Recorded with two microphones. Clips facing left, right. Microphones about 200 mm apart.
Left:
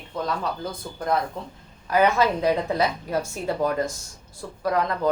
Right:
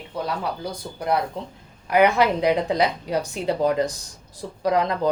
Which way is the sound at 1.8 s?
15° right (ahead or behind).